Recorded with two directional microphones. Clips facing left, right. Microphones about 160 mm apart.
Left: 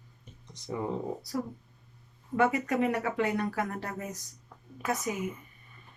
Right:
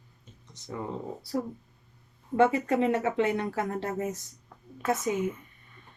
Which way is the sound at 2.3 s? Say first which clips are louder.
Right 3 dB; 25° right (ahead or behind).